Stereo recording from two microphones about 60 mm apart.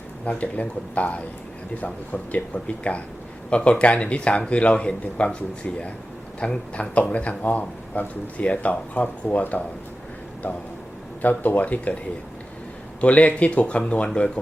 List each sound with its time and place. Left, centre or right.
0.3 s speech: left
2.3 s speech: left
11.2 s speech: left
13.0 s speech: left